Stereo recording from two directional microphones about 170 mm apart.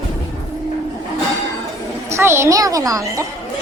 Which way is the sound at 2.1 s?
15° right (ahead or behind).